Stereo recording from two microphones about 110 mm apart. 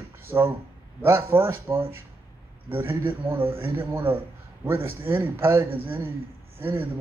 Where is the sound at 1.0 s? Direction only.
20° right (ahead or behind).